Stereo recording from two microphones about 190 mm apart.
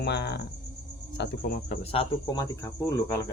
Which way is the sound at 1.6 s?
35° left (ahead or behind).